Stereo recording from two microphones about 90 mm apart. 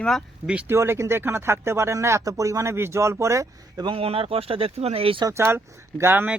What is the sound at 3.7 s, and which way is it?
Speech, 65° right (ahead or behind).